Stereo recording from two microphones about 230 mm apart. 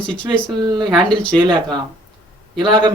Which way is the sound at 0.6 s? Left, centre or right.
Centre.